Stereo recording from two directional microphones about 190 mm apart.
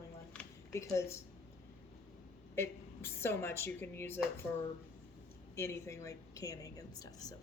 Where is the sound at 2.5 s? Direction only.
15° left (ahead or behind).